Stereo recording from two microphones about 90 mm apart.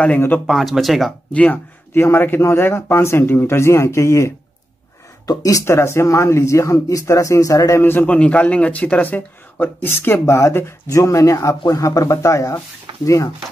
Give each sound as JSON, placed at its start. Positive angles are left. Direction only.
{"t": 0.5, "sound": "speech", "side_deg": 0}
{"t": 1.3, "sound": "speech", "side_deg": 15}
{"t": 2.0, "sound": "a man's voice", "side_deg": 25}
{"t": 7.8, "sound": "a man's voice", "side_deg": 25}